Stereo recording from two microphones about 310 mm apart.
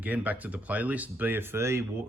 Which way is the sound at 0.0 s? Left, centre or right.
Centre.